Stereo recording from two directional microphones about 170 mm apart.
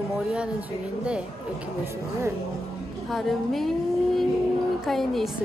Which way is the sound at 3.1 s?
Centre (ahead or behind).